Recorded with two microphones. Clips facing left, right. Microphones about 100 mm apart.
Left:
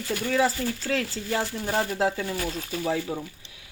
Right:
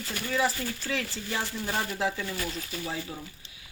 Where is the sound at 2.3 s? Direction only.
65° left (ahead or behind).